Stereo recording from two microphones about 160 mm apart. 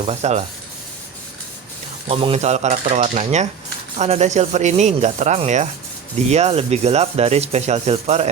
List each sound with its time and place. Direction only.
0.0 s speech: 40° right (ahead or behind)
2.0 s speech: 40° right (ahead or behind)